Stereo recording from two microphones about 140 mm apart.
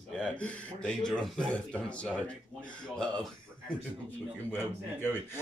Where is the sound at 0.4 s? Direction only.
5° left (ahead or behind).